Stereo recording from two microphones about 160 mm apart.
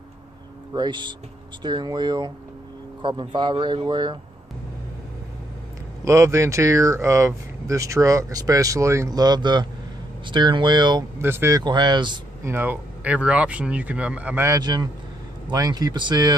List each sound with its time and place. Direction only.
0.7 s speech: 30° right (ahead or behind)
6.0 s speech: 20° right (ahead or behind)
11.1 s speech: 15° right (ahead or behind)
11.6 s speech: 25° right (ahead or behind)
12.4 s speech: 15° right (ahead or behind)